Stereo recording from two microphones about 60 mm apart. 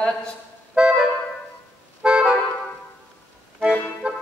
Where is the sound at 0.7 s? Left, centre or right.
Centre.